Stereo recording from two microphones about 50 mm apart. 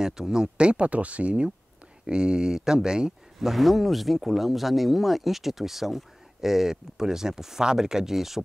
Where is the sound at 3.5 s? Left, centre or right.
Centre.